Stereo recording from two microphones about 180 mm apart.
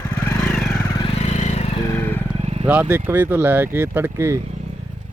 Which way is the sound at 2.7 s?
10° right (ahead or behind).